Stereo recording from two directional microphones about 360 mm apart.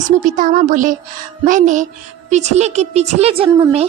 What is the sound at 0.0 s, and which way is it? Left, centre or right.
A woman's voice, right.